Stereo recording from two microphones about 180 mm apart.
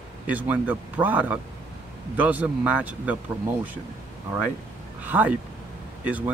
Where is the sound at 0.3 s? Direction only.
10° right (ahead or behind).